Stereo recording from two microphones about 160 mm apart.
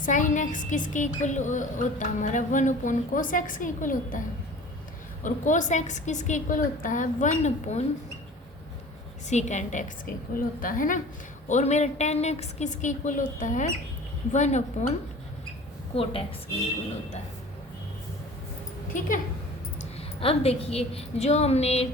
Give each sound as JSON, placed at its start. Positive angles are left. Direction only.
{"t": 0.0, "sound": "a woman's voice", "side_deg": 50}
{"t": 5.2, "sound": "a woman's voice", "side_deg": 50}
{"t": 9.3, "sound": "a woman's voice", "side_deg": 50}
{"t": 10.3, "sound": "a woman's voice", "side_deg": 60}
{"t": 15.9, "sound": "a woman's voice", "side_deg": 35}
{"t": 18.9, "sound": "a woman's voice", "side_deg": 55}
{"t": 19.8, "sound": "a woman's voice", "side_deg": 35}